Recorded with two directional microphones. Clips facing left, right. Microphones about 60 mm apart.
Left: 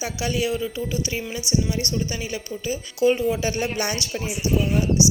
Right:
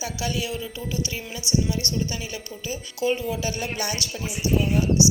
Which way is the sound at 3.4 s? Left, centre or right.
Left.